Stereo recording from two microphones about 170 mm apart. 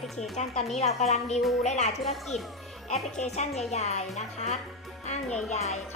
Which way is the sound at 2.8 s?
45° left (ahead or behind).